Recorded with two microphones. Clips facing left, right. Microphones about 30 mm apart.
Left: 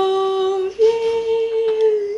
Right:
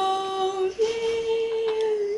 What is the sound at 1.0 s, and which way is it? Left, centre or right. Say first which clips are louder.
Humming: left 6 dB; centre.